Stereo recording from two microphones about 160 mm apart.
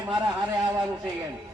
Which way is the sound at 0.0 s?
5° right (ahead or behind).